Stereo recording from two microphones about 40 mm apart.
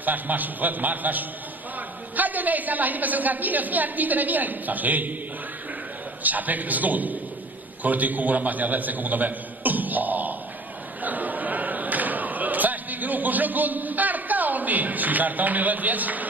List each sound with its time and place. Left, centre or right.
0.0 s a woman's voice: right
6.2 s a woman's voice: right
11.0 s a sound: right